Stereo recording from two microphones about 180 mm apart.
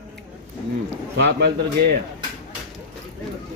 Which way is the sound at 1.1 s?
70° right (ahead or behind).